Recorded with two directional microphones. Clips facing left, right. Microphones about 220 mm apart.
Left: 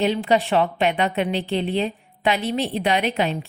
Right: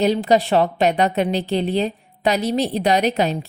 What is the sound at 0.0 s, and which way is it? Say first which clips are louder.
A woman's voice: right 3 dB; 40° right (ahead or behind).